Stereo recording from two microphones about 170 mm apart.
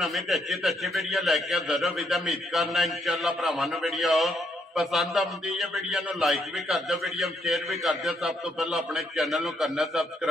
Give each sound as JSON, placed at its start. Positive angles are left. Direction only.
{"t": 0.0, "sound": "a man's voice", "side_deg": 0}